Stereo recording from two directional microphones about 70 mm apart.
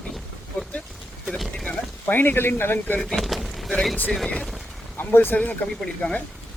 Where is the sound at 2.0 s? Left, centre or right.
Left.